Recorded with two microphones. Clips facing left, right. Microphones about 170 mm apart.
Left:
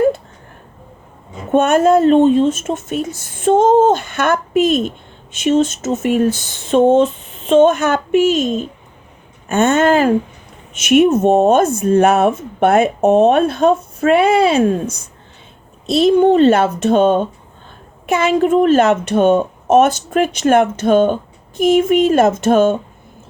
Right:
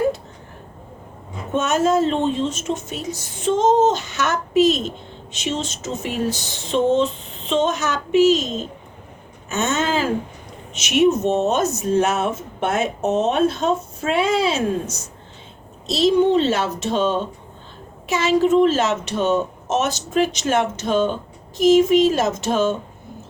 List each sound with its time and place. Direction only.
1.5 s speech: 55° left (ahead or behind)